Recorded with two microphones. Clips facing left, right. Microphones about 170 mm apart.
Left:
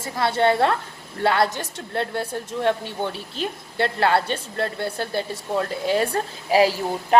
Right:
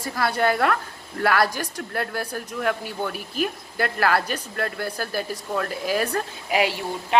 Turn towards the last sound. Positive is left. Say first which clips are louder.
# left 5 dB
turn(degrees=40)  # may be behind; listen again after turning